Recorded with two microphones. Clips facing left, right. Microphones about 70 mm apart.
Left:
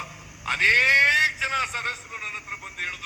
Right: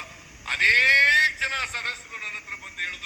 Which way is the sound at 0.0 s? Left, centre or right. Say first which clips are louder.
Left 5 dB; left.